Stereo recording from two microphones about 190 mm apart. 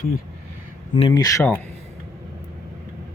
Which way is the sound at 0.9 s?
25° left (ahead or behind).